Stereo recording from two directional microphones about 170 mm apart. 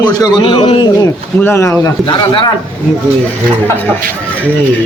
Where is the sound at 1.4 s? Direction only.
15° left (ahead or behind).